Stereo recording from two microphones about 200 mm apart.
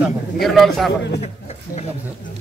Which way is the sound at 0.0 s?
Centre (ahead or behind).